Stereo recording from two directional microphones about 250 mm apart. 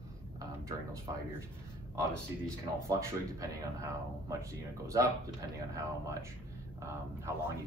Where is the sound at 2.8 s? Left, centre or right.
Centre.